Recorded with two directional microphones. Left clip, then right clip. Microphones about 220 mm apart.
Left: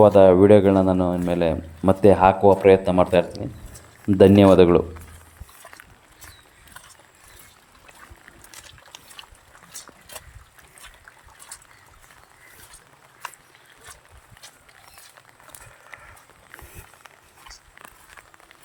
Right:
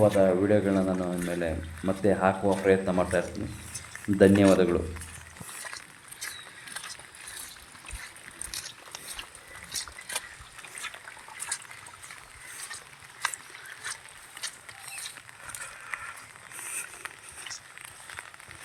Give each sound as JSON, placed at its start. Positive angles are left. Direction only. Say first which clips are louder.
{"t": 0.0, "sound": "speech", "louder": "left 10 dB", "side_deg": 35}